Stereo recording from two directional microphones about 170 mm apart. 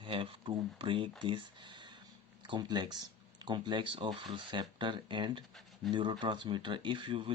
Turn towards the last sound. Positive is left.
turn(degrees=-30)  # may be behind; listen again after turning